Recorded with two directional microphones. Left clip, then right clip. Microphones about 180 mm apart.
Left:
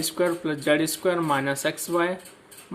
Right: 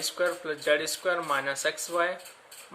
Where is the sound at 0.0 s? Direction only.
25° left (ahead or behind).